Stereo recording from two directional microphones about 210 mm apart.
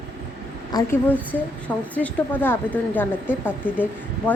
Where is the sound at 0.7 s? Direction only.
20° left (ahead or behind).